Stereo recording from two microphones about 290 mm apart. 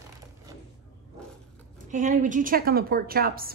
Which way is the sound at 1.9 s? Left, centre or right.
Right.